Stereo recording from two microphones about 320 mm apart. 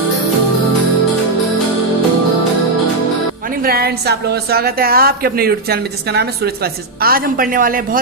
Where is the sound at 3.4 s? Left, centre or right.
Right.